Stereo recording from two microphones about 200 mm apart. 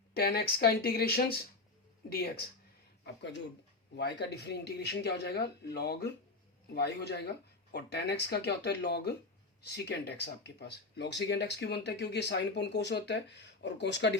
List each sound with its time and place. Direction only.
0.1 s speech: 50° left (ahead or behind)